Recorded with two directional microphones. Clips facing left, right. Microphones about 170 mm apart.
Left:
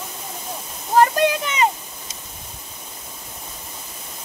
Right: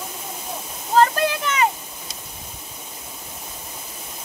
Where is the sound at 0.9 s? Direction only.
15° left (ahead or behind).